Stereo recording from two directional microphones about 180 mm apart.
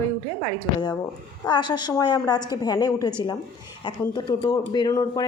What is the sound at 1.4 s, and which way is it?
Speech, 25° left (ahead or behind).